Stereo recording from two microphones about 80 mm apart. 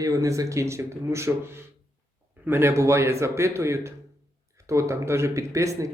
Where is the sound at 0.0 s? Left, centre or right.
Right.